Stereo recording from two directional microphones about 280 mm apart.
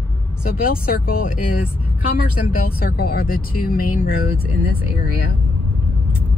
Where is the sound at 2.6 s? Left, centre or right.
Left.